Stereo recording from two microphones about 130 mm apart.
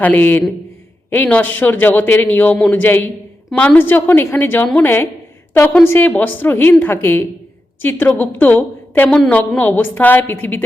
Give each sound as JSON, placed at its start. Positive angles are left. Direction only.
{"t": 0.0, "sound": "a man's voice", "side_deg": 10}
{"t": 9.6, "sound": "a man's voice", "side_deg": 15}